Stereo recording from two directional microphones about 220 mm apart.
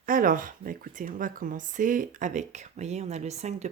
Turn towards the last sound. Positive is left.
turn(degrees=-30)  # may be behind; listen again after turning